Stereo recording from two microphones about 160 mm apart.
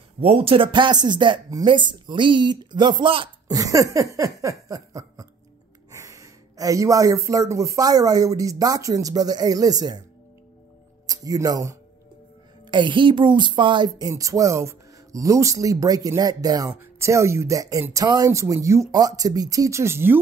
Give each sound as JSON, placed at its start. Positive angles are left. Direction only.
{"t": 0.2, "sound": "speech", "side_deg": -35}
{"t": 11.1, "sound": "speech", "side_deg": -20}
{"t": 12.7, "sound": "speech", "side_deg": -30}